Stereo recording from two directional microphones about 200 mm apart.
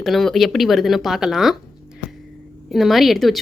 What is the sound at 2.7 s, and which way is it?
Speech, centre (ahead or behind).